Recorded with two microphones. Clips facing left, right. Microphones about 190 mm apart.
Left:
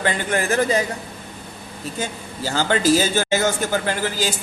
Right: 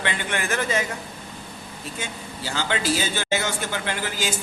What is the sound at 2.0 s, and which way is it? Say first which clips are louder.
A man's voice: left 7 dB; 40° left (ahead or behind).